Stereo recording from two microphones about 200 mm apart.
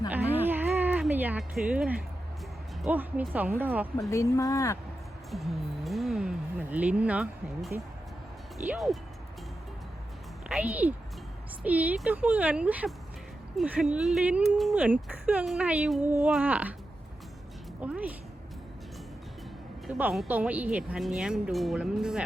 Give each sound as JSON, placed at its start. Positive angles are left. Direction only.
{"t": 0.1, "sound": "music", "side_deg": -10}
{"t": 2.8, "sound": "speech", "side_deg": -10}
{"t": 4.1, "sound": "speech", "side_deg": 15}
{"t": 5.3, "sound": "speech", "side_deg": 0}
{"t": 8.7, "sound": "speech", "side_deg": 0}
{"t": 10.5, "sound": "speech", "side_deg": -10}
{"t": 17.7, "sound": "speech", "side_deg": -5}
{"t": 19.9, "sound": "speech", "side_deg": -5}